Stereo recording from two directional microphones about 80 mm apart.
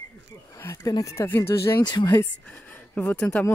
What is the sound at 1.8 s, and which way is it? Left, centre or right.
Speech, left.